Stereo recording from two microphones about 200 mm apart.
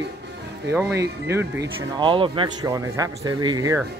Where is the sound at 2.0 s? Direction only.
25° right (ahead or behind).